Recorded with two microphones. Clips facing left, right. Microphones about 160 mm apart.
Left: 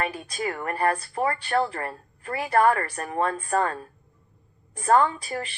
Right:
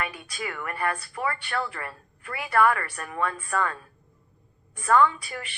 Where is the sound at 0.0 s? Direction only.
35° left (ahead or behind).